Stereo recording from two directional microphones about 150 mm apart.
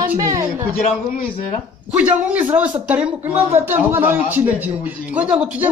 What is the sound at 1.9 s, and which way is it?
A man's voice, 10° right (ahead or behind).